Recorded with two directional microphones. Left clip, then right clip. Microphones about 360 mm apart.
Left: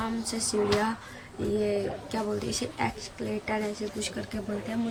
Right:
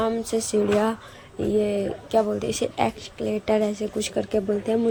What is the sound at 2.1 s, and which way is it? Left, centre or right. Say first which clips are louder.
A woman's voice: right 12 dB; centre.